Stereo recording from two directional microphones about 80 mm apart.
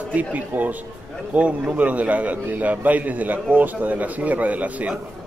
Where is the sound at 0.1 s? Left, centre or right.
Centre.